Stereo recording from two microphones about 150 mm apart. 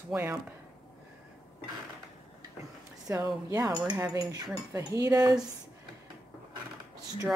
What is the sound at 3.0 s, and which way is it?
Speech, 20° right (ahead or behind).